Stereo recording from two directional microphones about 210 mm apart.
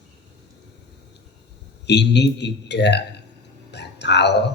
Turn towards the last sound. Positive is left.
turn(degrees=55)  # may be behind; listen again after turning